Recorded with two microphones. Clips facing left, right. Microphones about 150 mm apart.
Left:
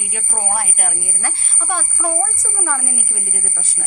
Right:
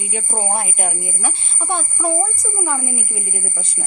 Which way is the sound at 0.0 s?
25° right (ahead or behind).